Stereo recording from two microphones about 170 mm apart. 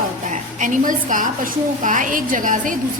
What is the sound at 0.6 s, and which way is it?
A woman's voice, 50° right (ahead or behind).